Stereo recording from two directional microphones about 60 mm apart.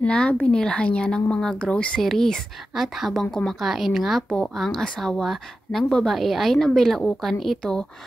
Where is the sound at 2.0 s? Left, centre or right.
Centre.